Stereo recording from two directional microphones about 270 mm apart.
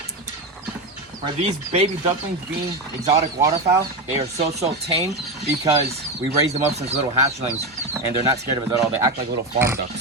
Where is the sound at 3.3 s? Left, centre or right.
Centre.